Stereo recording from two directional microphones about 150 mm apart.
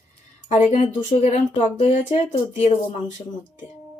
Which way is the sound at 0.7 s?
50° left (ahead or behind).